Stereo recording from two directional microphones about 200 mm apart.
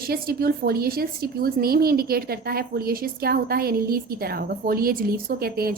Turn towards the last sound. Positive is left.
turn(degrees=-50)  # may be behind; listen again after turning